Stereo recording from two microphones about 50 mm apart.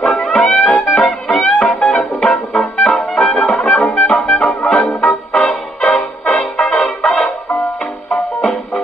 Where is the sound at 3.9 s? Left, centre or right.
Centre.